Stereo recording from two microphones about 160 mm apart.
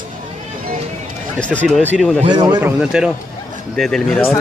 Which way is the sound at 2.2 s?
25° right (ahead or behind).